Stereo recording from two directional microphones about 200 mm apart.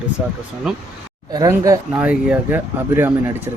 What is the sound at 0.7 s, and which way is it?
Speech, centre (ahead or behind).